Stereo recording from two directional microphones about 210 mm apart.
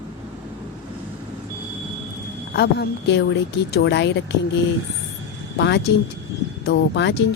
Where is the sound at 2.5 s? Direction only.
50° left (ahead or behind).